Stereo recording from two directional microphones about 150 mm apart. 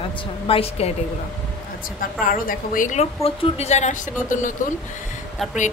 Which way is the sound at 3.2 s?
45° left (ahead or behind).